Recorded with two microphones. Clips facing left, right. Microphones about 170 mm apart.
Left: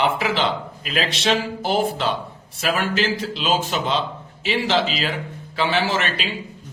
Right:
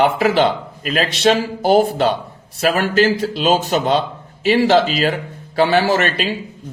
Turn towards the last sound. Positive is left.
turn(degrees=-45)  # may be behind; listen again after turning